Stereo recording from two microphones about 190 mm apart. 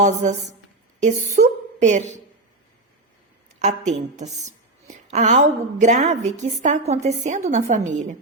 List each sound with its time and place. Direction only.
0.0 s a woman's voice: 35° right (ahead or behind)
3.6 s a woman's voice: 35° right (ahead or behind)